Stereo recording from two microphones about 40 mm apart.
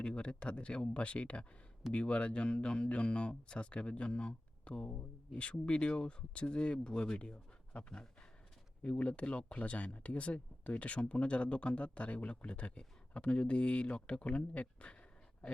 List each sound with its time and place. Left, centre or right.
0.0 s speech: left
4.9 s speech: left
8.8 s speech: left